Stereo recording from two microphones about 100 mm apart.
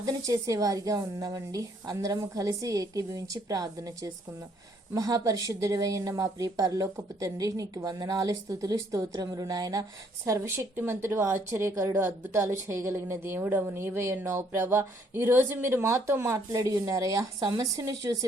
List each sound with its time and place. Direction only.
0.0 s a woman's voice: 35° right (ahead or behind)
10.2 s a woman's voice: 30° right (ahead or behind)
16.5 s a woman's voice: 35° right (ahead or behind)